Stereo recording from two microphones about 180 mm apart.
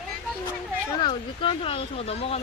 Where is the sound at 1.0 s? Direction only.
30° left (ahead or behind).